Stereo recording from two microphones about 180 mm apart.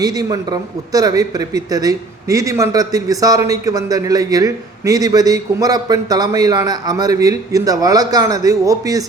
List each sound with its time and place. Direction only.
0.0 s speech: 20° right (ahead or behind)